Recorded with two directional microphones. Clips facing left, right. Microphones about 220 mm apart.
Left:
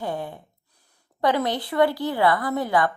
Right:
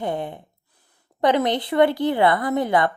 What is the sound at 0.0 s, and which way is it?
A woman's voice, 20° right (ahead or behind).